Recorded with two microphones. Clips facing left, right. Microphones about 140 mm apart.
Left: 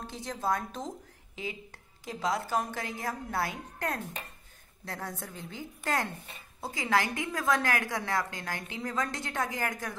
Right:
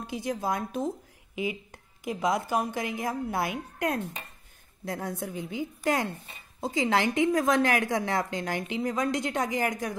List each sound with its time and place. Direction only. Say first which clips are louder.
0.0 s speech: right 4 dB; 10° right (ahead or behind)